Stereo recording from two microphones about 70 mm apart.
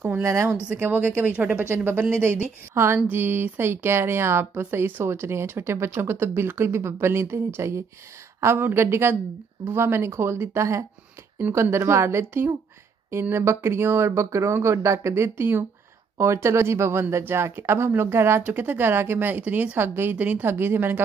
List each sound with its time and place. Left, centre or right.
0.2 s speech: right
0.7 s a woman's voice: right
1.7 s a woman's voice: right
19.8 s speech: right